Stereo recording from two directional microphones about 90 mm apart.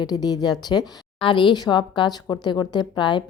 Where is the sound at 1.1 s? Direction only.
70° left (ahead or behind).